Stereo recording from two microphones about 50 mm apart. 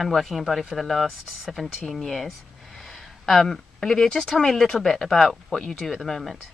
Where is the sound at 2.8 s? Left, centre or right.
Centre.